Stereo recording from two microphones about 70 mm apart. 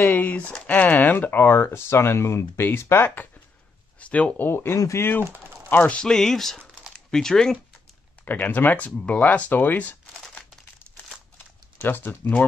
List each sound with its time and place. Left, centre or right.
0.0 s speech: left
4.0 s speech: centre
4.5 s speech: left
4.7 s speech: left
5.2 s speech: right
5.7 s speech: left
5.9 s speech: centre
8.3 s speech: left
11.8 s speech: left